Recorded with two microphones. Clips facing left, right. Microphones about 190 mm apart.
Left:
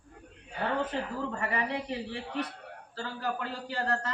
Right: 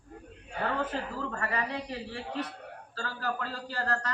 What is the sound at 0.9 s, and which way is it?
A man's voice, 15° left (ahead or behind).